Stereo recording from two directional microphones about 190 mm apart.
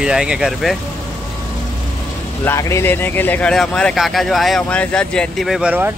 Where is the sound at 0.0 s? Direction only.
5° right (ahead or behind).